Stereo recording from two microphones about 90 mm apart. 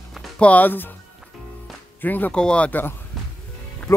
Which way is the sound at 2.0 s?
20° left (ahead or behind).